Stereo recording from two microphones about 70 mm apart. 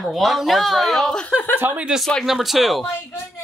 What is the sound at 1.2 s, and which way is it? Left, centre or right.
Speech, left.